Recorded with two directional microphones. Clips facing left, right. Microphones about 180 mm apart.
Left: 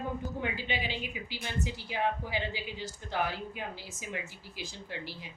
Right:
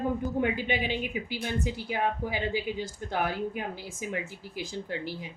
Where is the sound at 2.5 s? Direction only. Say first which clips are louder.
Right 8 dB; 50° right (ahead or behind).